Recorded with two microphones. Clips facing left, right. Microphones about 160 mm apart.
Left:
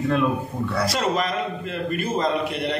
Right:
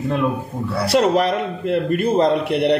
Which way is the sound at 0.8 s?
65° right (ahead or behind).